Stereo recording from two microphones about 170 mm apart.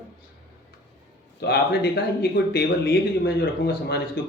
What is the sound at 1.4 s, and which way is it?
Speech, 75° left (ahead or behind).